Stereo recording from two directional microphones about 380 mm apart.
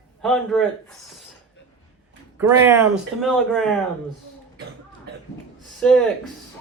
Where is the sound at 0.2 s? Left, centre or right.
Centre.